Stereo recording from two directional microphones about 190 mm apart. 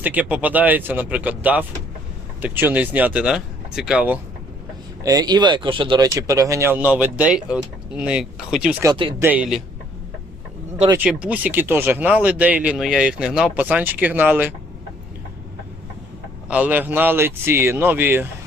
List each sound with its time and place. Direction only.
0.0 s speech: 10° right (ahead or behind)
5.0 s speech: 20° right (ahead or behind); by 8.7 s 5° right (ahead or behind)
8.8 s speech: 25° right (ahead or behind)
9.2 s speech: 5° right (ahead or behind)
10.8 s speech: 10° right (ahead or behind)
16.5 s speech: 10° right (ahead or behind)